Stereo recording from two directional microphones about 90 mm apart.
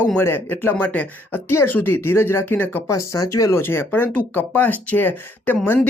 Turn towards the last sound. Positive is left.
turn(degrees=20)  # may be behind; listen again after turning